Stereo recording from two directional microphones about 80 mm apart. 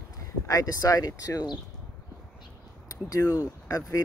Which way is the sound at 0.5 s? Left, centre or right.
Left.